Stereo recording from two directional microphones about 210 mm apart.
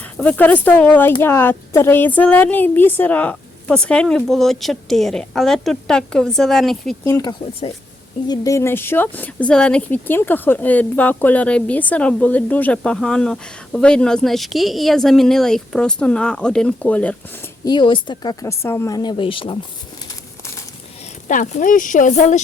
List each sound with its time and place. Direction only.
0.2 s speech: 5° left (ahead or behind)
7.0 s speech: 15° left (ahead or behind)
17.7 s speech: 20° left (ahead or behind)
21.2 s speech: 35° left (ahead or behind)